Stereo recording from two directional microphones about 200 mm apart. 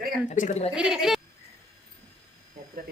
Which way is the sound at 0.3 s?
40° left (ahead or behind).